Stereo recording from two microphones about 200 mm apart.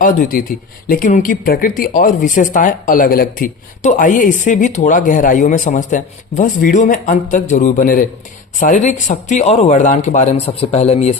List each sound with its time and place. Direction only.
0.0 s speech: 40° left (ahead or behind)